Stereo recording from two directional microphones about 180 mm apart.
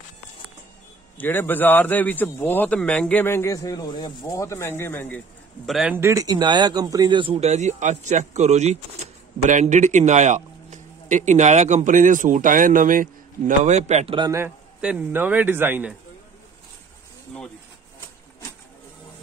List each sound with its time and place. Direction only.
1.1 s a man's voice: 10° left (ahead or behind)
5.7 s speech: centre (ahead or behind)
5.9 s speech: 15° right (ahead or behind); by 14.1 s 40° right (ahead or behind)
14.1 s a man's voice: 20° right (ahead or behind)